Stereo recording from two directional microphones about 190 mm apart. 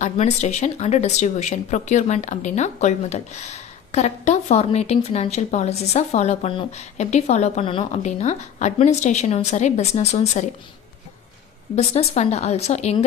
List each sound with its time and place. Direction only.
0.0 s a woman's voice: 35° left (ahead or behind)
11.7 s a woman's voice: 35° left (ahead or behind)